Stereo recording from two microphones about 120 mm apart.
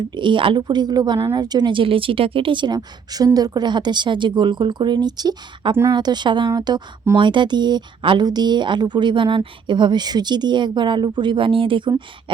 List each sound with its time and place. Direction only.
0.1 s speech: 40° right (ahead or behind)